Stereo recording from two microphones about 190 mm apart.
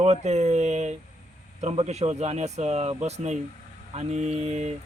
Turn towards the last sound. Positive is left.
turn(degrees=-35)  # may be behind; listen again after turning